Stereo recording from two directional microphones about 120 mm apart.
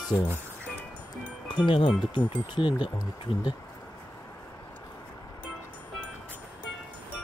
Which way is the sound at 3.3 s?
55° left (ahead or behind).